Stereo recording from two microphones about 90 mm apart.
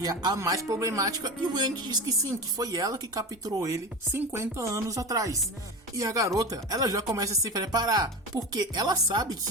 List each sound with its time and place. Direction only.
0.0 s chopping: 45° right (ahead or behind)
0.3 s speech: 35° right (ahead or behind)
7.6 s chopping: 45° right (ahead or behind)